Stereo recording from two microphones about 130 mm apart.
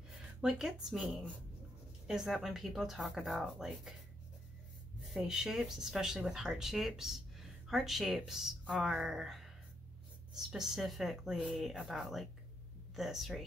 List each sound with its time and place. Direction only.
0.4 s speech: 5° right (ahead or behind)
5.1 s speech: 5° right (ahead or behind)